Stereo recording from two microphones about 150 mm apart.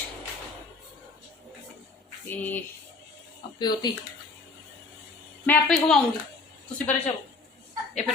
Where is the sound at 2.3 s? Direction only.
15° left (ahead or behind).